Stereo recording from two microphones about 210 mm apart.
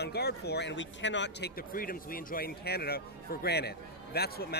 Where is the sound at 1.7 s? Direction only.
45° left (ahead or behind).